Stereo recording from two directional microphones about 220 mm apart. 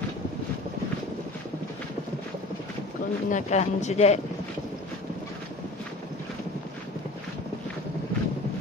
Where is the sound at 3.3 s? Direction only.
30° left (ahead or behind).